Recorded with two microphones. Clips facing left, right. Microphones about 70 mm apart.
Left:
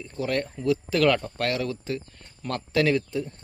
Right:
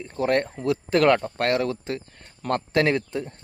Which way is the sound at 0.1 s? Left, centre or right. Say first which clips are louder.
Right 5 dB; right.